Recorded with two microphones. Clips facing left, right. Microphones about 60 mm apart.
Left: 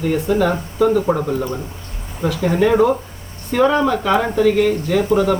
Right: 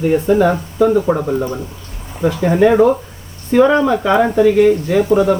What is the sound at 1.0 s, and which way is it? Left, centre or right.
Speech, centre.